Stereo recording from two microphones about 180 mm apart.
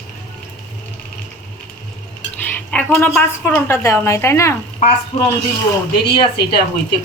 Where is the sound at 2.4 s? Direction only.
10° left (ahead or behind).